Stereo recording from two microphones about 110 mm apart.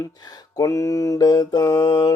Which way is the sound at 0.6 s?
30° left (ahead or behind).